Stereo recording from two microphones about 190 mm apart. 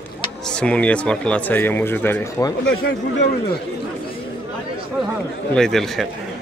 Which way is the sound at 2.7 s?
85° left.